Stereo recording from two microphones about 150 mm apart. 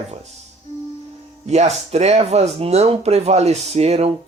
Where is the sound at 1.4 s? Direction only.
45° right (ahead or behind).